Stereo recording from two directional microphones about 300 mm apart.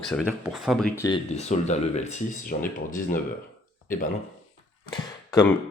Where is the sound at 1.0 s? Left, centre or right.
Centre.